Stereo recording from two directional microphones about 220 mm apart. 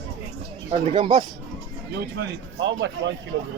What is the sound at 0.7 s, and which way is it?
Speech, 25° right (ahead or behind).